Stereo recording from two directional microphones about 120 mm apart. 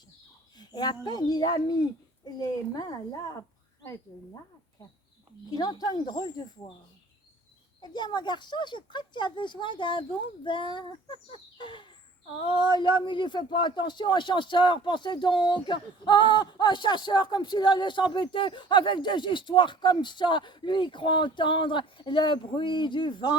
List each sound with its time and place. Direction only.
0.6 s speech: 35° left (ahead or behind)
5.5 s speech: 35° left (ahead or behind)
7.8 s speech: 35° left (ahead or behind)